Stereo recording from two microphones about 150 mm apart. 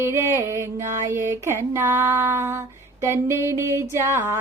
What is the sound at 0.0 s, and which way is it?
Female singing, 15° right (ahead or behind).